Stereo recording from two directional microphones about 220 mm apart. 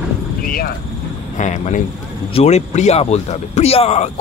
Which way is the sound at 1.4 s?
35° left (ahead or behind).